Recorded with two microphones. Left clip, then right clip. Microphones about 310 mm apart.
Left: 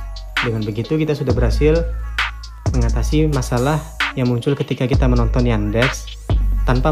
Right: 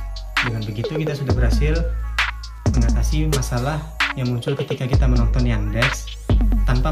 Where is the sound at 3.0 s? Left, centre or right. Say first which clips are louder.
Left 9 dB; centre.